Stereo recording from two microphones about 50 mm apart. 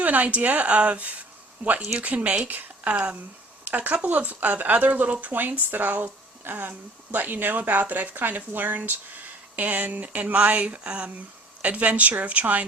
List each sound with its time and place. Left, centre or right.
0.0 s speech: right
2.5 s a sound: right
3.6 s speech: right